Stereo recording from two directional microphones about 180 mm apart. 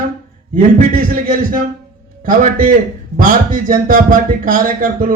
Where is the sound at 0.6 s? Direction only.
50° right (ahead or behind).